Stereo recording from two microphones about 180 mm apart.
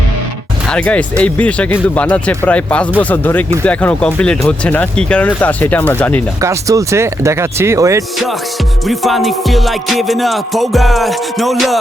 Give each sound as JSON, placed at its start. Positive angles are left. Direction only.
{"t": 0.7, "sound": "speech", "side_deg": 5}
{"t": 6.4, "sound": "speech", "side_deg": -15}
{"t": 8.9, "sound": "music", "side_deg": 0}